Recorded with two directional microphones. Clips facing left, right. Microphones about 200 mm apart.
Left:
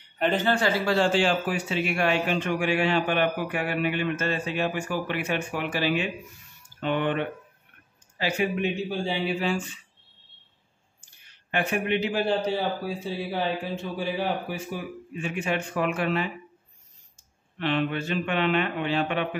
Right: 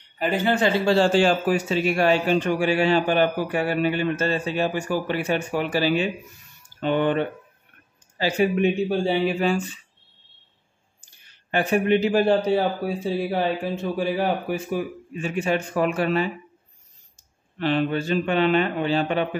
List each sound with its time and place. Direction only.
0.2 s a man's voice: 10° right (ahead or behind); by 8.5 s 35° right (ahead or behind)
8.5 s a man's voice: 50° right (ahead or behind)
11.5 s a man's voice: 40° right (ahead or behind); by 13.4 s 55° right (ahead or behind)
14.5 s a man's voice: 45° right (ahead or behind)
17.6 s a man's voice: 35° right (ahead or behind)